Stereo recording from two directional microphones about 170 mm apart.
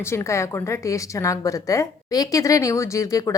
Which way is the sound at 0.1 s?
15° left (ahead or behind).